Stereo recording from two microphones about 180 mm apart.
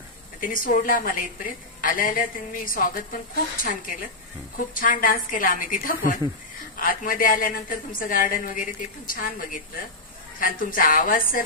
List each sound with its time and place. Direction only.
0.4 s a woman's voice: 50° left (ahead or behind)